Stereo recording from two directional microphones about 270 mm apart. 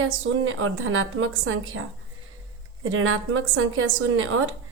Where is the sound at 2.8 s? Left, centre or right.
Right.